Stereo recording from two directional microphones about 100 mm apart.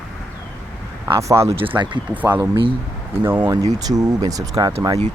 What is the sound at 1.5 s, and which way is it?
Speech, 55° right (ahead or behind).